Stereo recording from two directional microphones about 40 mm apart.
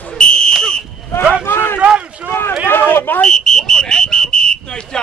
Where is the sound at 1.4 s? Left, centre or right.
Left.